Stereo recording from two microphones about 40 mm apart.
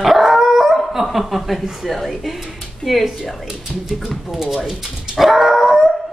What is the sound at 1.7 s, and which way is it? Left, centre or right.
Speech, centre.